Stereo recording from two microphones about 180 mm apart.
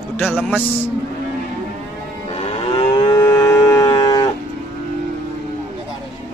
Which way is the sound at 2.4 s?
25° left (ahead or behind).